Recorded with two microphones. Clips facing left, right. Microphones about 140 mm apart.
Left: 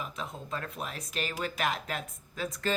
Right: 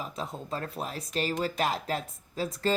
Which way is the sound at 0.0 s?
35° right (ahead or behind).